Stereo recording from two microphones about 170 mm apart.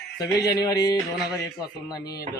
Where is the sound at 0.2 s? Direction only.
20° left (ahead or behind).